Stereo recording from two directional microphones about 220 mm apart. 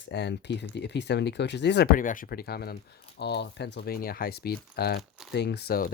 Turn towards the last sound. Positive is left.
turn(degrees=45)  # may be behind; listen again after turning